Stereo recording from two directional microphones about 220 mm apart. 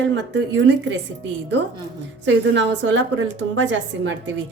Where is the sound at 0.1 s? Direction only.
55° right (ahead or behind).